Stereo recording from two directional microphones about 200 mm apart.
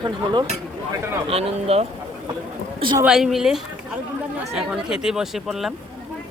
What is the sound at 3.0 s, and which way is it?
Speech, centre (ahead or behind).